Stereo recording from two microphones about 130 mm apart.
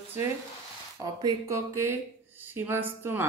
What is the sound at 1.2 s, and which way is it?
Speech, 25° right (ahead or behind).